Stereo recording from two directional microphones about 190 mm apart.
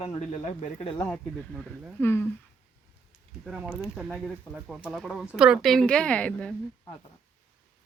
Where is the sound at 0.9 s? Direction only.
15° left (ahead or behind).